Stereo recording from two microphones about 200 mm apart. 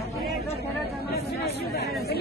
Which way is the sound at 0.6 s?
50° left (ahead or behind).